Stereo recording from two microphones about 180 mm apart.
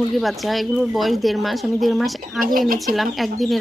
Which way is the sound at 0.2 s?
Centre (ahead or behind).